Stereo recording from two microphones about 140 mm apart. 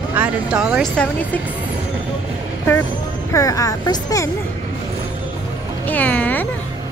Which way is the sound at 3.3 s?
25° left (ahead or behind).